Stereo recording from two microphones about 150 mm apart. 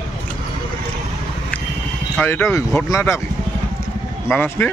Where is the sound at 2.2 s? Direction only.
15° left (ahead or behind).